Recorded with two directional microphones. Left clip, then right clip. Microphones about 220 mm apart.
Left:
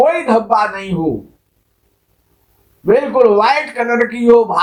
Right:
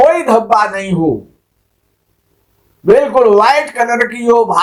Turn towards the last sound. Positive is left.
turn(degrees=-30)  # may be behind; listen again after turning